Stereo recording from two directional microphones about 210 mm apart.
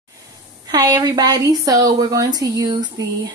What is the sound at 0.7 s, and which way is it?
A woman's voice, 20° right (ahead or behind).